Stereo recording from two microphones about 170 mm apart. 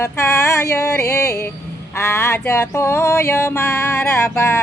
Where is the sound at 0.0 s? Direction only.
15° left (ahead or behind).